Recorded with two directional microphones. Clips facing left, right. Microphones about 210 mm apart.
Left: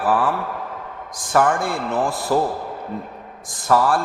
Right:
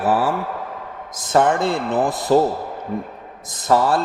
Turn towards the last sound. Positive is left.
turn(degrees=-25)  # may be behind; listen again after turning